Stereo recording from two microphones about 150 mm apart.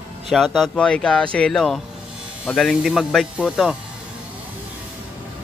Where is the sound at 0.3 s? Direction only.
Centre (ahead or behind).